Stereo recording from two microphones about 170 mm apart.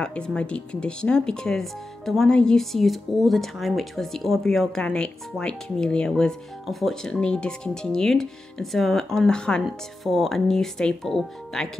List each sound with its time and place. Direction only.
0.0 s speech: 5° left (ahead or behind)